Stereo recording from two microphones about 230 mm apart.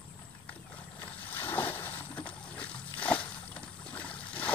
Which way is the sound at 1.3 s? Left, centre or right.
Centre.